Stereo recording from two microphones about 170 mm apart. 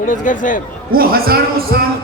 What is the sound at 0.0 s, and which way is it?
Speech, 50° left (ahead or behind).